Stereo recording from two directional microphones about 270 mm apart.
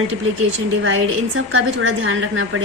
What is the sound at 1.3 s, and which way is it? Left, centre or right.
A woman's voice, right.